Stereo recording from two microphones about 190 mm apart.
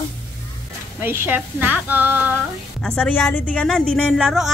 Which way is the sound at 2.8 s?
5° left (ahead or behind).